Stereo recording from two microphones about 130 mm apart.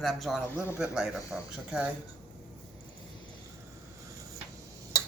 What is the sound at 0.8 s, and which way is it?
Speech, 5° right (ahead or behind).